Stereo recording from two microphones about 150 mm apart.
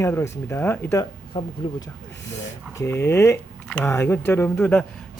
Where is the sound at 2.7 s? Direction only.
20° left (ahead or behind).